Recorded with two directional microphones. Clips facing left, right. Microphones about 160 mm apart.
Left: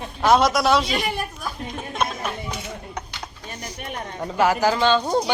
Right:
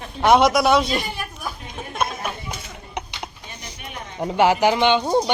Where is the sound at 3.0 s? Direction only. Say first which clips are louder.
Right 2 dB; 20° right (ahead or behind).